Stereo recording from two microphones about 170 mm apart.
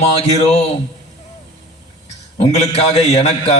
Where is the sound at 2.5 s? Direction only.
40° left (ahead or behind).